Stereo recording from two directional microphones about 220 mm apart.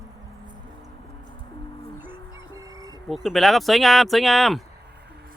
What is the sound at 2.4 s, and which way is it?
Chicken, 15° right (ahead or behind).